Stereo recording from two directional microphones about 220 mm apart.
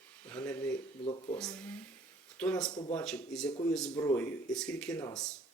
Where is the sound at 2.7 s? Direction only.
20° left (ahead or behind).